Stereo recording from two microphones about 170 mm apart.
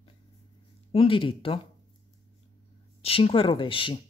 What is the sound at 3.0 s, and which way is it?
Speech, 35° left (ahead or behind).